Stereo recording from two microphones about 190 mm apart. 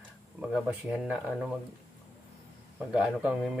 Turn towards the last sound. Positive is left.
turn(degrees=-5)  # may be behind; listen again after turning